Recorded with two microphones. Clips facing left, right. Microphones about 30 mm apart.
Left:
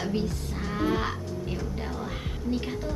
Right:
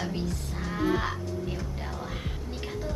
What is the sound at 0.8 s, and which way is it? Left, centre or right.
Music, centre.